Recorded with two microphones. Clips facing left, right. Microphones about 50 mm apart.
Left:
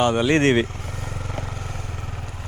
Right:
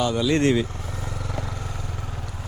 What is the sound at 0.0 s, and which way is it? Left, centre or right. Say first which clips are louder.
Speech: left 3 dB; left.